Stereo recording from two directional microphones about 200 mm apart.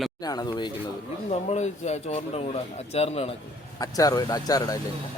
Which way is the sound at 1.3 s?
35° left (ahead or behind).